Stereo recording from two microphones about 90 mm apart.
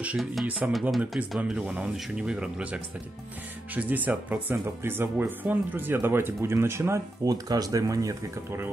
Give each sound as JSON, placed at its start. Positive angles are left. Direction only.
{"t": 0.2, "sound": "speech", "side_deg": 0}
{"t": 0.5, "sound": "speech", "side_deg": -15}
{"t": 0.9, "sound": "speech", "side_deg": 0}
{"t": 1.4, "sound": "speech", "side_deg": -15}
{"t": 7.2, "sound": "speech", "side_deg": -45}